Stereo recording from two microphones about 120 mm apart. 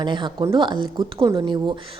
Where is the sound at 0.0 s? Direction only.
40° right (ahead or behind).